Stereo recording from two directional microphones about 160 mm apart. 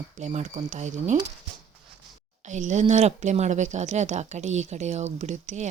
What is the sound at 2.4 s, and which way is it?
Speech, 50° right (ahead or behind).